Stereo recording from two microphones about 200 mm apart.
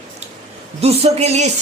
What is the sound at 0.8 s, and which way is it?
Speech, 30° right (ahead or behind).